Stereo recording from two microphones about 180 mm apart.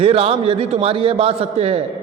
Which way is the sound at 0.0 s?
30° right (ahead or behind).